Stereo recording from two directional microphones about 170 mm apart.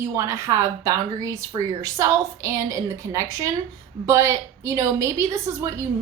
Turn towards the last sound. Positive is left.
turn(degrees=-20)  # may be behind; listen again after turning